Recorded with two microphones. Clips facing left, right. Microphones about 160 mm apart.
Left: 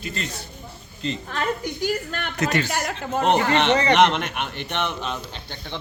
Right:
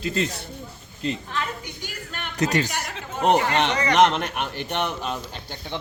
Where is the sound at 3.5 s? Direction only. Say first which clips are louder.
Left 4 dB; 30° left (ahead or behind).